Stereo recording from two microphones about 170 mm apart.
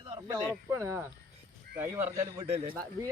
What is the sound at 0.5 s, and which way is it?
Speech, 15° right (ahead or behind).